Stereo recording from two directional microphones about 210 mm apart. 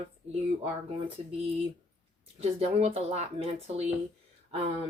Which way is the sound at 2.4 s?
30° right (ahead or behind).